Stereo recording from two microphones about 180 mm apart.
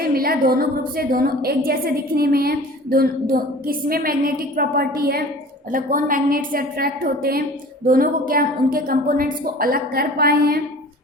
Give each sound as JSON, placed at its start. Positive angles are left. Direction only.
{"t": 0.0, "sound": "a woman's voice", "side_deg": -55}